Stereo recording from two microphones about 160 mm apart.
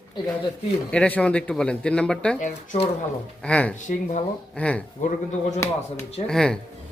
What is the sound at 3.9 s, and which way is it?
Speech, 50° left (ahead or behind).